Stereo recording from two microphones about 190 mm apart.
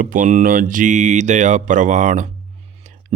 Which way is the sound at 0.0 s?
45° right (ahead or behind).